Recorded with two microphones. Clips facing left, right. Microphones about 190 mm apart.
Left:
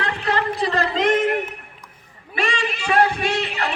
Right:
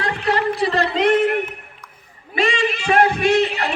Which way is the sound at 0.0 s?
35° right (ahead or behind).